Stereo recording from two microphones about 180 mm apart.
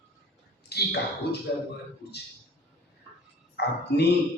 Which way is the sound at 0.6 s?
65° left (ahead or behind).